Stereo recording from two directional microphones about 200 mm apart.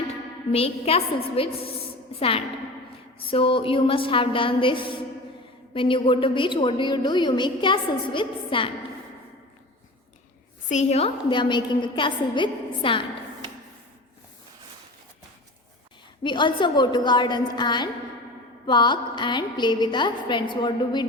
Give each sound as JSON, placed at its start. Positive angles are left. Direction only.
{"t": 0.5, "sound": "a woman's voice", "side_deg": 30}
{"t": 10.7, "sound": "a woman's voice", "side_deg": 35}
{"t": 16.2, "sound": "a woman's voice", "side_deg": 25}